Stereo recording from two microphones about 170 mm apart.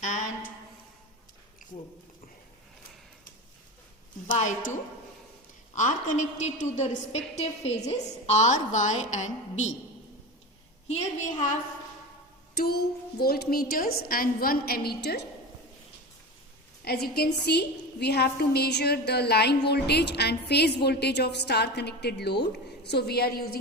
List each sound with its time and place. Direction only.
0.0 s a sound: 45° left (ahead or behind)
4.3 s a woman's voice: 45° left (ahead or behind)
10.8 s a woman's voice: 45° left (ahead or behind)
12.5 s a woman's voice: 65° left (ahead or behind)
16.8 s a woman's voice: 65° left (ahead or behind)